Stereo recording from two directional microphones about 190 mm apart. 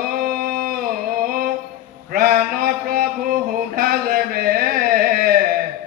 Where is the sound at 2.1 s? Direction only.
50° right (ahead or behind).